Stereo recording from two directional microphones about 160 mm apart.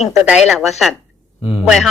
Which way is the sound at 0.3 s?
5° right (ahead or behind).